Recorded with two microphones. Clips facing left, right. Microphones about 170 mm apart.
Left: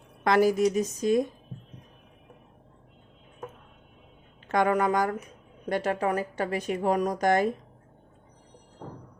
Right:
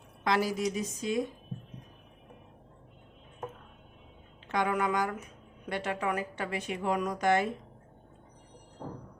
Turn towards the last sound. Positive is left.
turn(degrees=40)  # may be behind; listen again after turning